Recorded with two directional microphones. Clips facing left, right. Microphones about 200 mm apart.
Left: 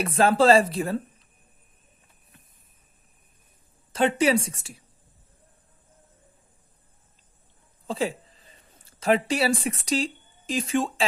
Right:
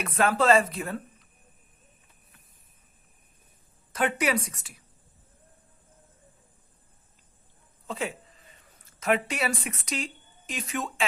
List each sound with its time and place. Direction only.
0.0 s speech: 30° left (ahead or behind)
3.9 s a woman's voice: 30° left (ahead or behind)
7.9 s speech: 30° left (ahead or behind)